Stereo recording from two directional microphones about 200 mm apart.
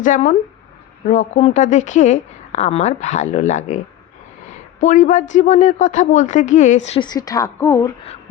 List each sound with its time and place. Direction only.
0.0 s speech: 40° left (ahead or behind); by 7.9 s 15° left (ahead or behind)